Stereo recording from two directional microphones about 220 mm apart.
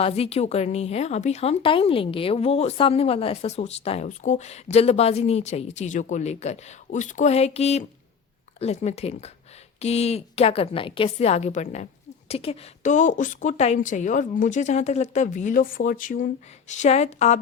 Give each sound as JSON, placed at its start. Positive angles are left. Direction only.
{"t": 0.0, "sound": "a woman's voice", "side_deg": 25}